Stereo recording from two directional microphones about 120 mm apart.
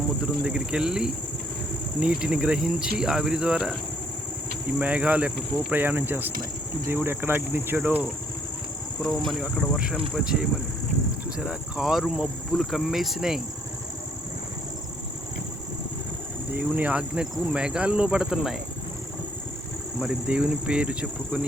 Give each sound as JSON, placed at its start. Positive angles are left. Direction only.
{"t": 0.4, "sound": "speech", "side_deg": -5}
{"t": 4.8, "sound": "speech", "side_deg": -10}
{"t": 9.0, "sound": "speech", "side_deg": 0}
{"t": 11.3, "sound": "speech", "side_deg": -5}
{"t": 16.5, "sound": "speech", "side_deg": -15}
{"t": 20.0, "sound": "speech", "side_deg": -5}